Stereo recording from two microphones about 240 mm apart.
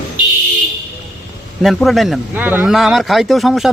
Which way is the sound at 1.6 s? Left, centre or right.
Centre.